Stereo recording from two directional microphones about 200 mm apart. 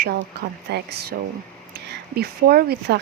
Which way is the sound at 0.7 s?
55° right (ahead or behind).